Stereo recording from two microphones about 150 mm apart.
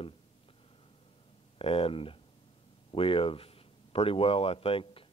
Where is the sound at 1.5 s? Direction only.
40° left (ahead or behind).